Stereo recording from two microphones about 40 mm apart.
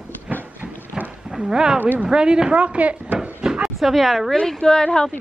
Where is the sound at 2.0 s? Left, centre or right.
Right.